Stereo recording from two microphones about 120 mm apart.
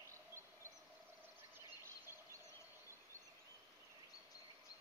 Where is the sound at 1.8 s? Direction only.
25° right (ahead or behind).